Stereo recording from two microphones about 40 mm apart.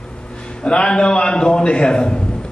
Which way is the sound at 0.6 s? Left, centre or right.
Left.